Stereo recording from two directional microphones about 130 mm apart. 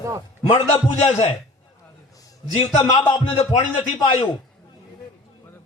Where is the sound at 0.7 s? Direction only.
55° left (ahead or behind).